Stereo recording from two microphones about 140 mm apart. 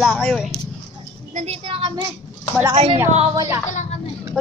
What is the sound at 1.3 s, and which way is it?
A child's voice, 50° right (ahead or behind).